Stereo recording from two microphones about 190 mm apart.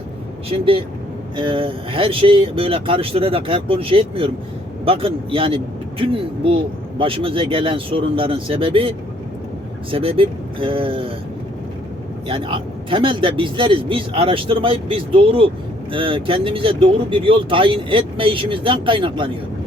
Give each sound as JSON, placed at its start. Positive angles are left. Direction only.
{"t": 0.5, "sound": "speech", "side_deg": -30}
{"t": 12.3, "sound": "speech", "side_deg": -25}